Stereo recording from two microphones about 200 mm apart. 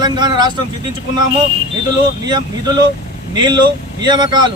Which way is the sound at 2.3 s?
20° right (ahead or behind).